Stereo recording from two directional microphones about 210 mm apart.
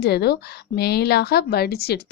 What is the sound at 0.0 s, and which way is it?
A woman's voice, 50° left (ahead or behind).